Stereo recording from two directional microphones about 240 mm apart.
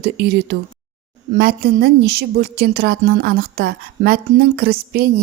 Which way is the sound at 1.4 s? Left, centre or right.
Right.